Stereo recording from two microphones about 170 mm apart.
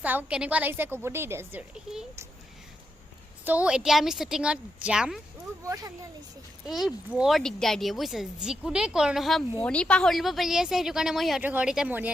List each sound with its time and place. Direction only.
0.0 s a woman's voice: 10° right (ahead or behind)
3.4 s speech: 10° right (ahead or behind)
5.6 s speech: 20° right (ahead or behind)
6.7 s speech: centre (ahead or behind)